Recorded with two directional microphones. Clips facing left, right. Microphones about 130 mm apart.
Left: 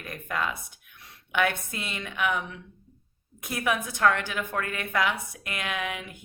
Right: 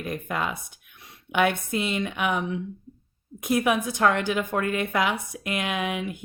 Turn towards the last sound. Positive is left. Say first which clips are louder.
# right 5 dB
turn(degrees=-20)  # may be behind; listen again after turning